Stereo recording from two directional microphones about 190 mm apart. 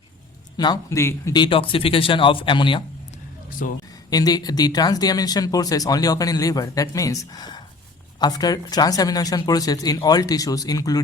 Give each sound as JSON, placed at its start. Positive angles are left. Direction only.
{"t": 0.5, "sound": "speech", "side_deg": 20}
{"t": 3.6, "sound": "speech", "side_deg": 45}
{"t": 4.1, "sound": "speech", "side_deg": 20}